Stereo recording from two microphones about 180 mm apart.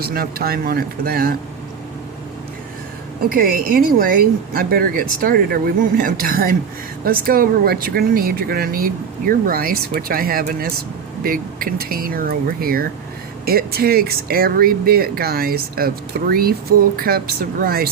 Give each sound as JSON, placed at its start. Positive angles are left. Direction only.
{"t": 0.0, "sound": "speech", "side_deg": -55}
{"t": 3.2, "sound": "speech", "side_deg": -50}